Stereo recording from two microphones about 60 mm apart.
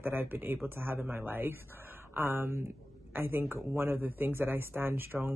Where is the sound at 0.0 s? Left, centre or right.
Right.